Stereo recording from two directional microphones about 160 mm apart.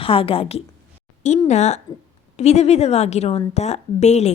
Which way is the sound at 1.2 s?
45° left (ahead or behind).